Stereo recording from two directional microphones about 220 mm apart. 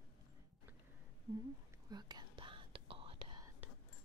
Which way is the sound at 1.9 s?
20° right (ahead or behind).